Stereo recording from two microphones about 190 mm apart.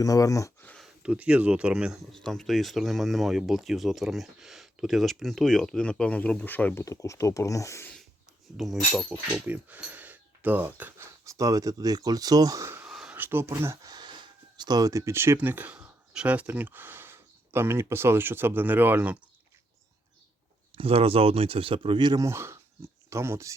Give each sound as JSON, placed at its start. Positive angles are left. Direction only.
{"t": 0.0, "sound": "a sound", "side_deg": 20}
{"t": 1.0, "sound": "speech", "side_deg": -5}
{"t": 8.5, "sound": "speech", "side_deg": 0}
{"t": 20.7, "sound": "speech", "side_deg": -30}